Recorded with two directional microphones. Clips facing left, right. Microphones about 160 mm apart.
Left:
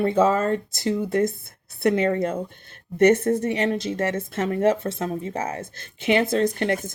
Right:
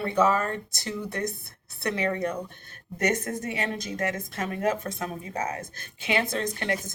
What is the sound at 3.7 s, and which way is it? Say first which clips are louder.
Speech: left 6 dB; 25° left (ahead or behind).